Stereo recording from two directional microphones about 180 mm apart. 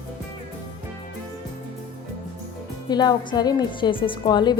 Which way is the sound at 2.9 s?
20° left (ahead or behind).